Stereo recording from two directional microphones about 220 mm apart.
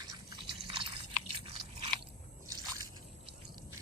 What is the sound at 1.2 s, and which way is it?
Biting, 25° right (ahead or behind).